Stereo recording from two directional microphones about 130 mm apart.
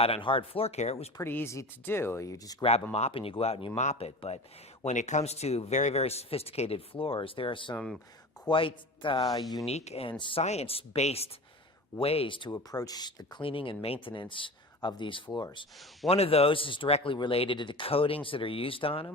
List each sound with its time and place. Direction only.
0.0 s speech: 45° left (ahead or behind)
1.2 s speech: 15° left (ahead or behind)
2.9 s speech: 50° left (ahead or behind)
3.8 s a man's voice: 65° left (ahead or behind); by 9.4 s 35° left (ahead or behind)
9.6 s speech: 55° left (ahead or behind); by 10.4 s 40° left (ahead or behind)
10.4 s speech: 55° left (ahead or behind)
12.5 s speech: 25° left (ahead or behind)
16.0 s speech: 50° left (ahead or behind)